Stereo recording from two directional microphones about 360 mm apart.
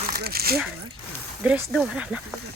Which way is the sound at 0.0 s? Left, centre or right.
Right.